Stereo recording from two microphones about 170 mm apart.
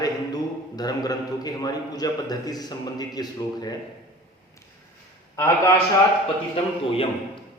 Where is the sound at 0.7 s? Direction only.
20° left (ahead or behind).